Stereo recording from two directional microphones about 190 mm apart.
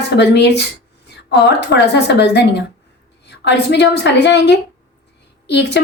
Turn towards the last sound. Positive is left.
turn(degrees=65)  # may be behind; listen again after turning